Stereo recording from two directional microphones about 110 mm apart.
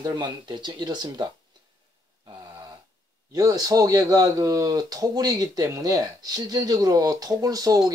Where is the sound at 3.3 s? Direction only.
30° right (ahead or behind).